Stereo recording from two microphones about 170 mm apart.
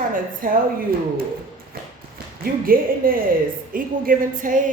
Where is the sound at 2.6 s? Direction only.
55° right (ahead or behind).